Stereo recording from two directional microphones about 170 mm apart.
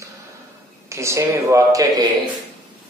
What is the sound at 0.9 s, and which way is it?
A man's voice, 15° right (ahead or behind).